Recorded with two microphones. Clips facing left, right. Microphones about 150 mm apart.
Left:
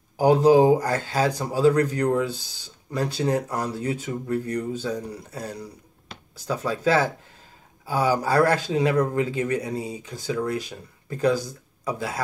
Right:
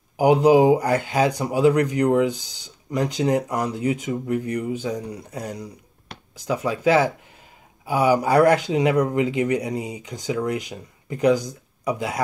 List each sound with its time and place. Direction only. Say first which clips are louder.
0.2 s speech: right 1 dB; 15° right (ahead or behind)